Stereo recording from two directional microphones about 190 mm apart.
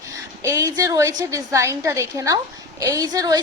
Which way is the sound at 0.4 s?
15° right (ahead or behind).